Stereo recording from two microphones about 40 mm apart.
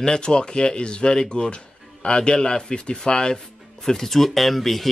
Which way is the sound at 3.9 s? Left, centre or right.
Centre.